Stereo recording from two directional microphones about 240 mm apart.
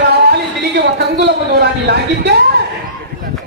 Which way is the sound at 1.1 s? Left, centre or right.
Right.